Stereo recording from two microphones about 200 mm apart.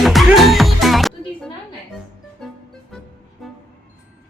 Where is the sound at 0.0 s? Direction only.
Centre (ahead or behind).